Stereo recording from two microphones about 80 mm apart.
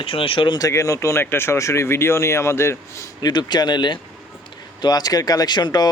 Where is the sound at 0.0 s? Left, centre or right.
Left.